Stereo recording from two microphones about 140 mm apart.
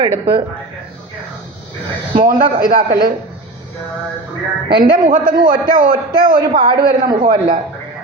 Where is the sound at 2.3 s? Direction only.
85° right.